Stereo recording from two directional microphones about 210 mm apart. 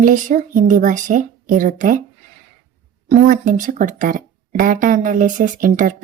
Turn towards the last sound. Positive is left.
turn(degrees=-40)  # may be behind; listen again after turning